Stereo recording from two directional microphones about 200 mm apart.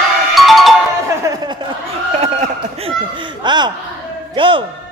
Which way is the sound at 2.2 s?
30° right (ahead or behind).